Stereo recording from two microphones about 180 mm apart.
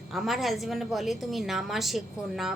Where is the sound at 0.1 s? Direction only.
Centre (ahead or behind).